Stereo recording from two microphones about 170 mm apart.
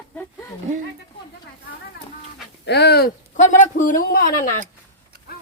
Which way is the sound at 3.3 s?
50° left (ahead or behind).